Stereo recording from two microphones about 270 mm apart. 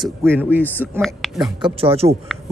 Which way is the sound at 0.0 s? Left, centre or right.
Centre.